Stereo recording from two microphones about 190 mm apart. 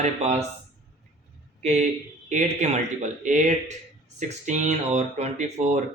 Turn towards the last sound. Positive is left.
turn(degrees=-35)  # may be behind; listen again after turning